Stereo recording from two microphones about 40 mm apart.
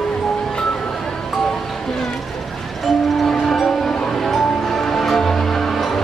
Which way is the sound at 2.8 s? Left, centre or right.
Centre.